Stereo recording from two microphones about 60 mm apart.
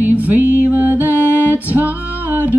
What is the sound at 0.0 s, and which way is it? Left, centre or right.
Music, right.